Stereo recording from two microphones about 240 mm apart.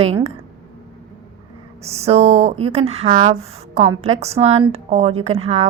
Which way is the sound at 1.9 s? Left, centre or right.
Right.